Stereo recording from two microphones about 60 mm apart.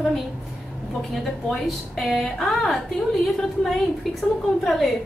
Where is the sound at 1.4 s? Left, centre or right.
Centre.